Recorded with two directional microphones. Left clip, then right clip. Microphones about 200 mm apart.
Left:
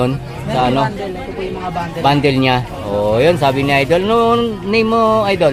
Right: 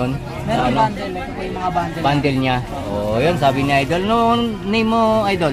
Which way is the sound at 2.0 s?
25° left (ahead or behind).